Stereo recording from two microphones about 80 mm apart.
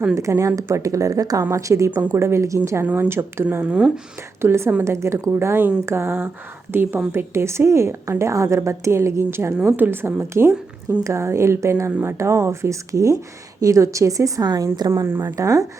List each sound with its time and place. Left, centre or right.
0.1 s a woman's voice: right
2.8 s a woman's voice: right
3.7 s speech: centre
4.4 s a woman's voice: right
14.4 s speech: right
14.8 s a woman's voice: right
15.4 s speech: right